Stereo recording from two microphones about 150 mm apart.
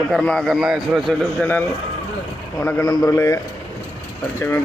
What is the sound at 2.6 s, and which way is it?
Speech, 20° left (ahead or behind).